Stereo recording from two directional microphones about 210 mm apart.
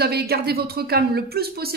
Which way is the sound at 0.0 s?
50° right (ahead or behind).